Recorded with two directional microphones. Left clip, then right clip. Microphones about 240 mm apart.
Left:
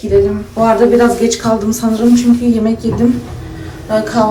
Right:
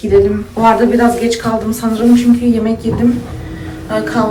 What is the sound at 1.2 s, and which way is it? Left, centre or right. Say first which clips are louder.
A woman's voice: left 1 dB; left.